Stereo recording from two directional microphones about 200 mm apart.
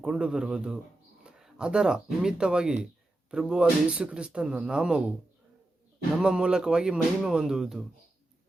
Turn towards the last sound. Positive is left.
turn(degrees=0)  # may be behind; listen again after turning